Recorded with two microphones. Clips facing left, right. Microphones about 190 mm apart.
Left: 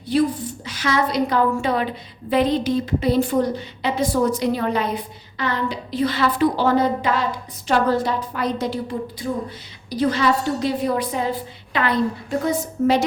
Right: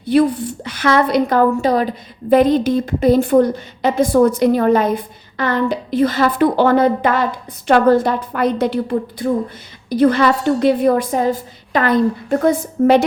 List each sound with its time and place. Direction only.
0.0 s a woman's voice: 60° right (ahead or behind)